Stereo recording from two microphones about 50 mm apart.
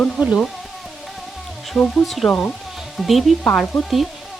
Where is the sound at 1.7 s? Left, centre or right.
Centre.